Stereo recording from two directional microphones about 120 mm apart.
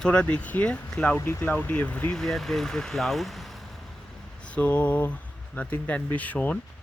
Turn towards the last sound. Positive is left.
turn(degrees=10)  # may be behind; listen again after turning